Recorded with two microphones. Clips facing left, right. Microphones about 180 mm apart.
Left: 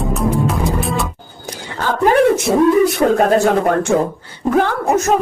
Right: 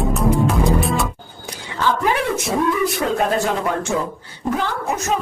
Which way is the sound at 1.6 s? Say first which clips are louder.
Left 4 dB; 45° left (ahead or behind).